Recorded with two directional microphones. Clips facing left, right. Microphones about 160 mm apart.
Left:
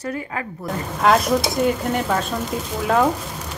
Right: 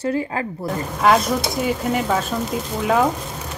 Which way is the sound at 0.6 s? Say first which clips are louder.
Right 1 dB; centre (ahead or behind).